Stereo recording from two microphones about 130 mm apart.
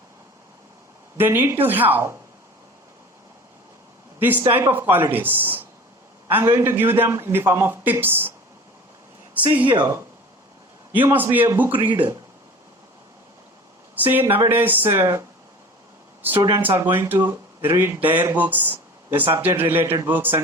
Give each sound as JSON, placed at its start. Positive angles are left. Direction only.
{"t": 1.1, "sound": "speech", "side_deg": -15}
{"t": 4.2, "sound": "speech", "side_deg": -15}
{"t": 9.6, "sound": "speech", "side_deg": -30}
{"t": 10.9, "sound": "speech", "side_deg": -15}
{"t": 13.9, "sound": "speech", "side_deg": -15}
{"t": 16.8, "sound": "speech", "side_deg": -15}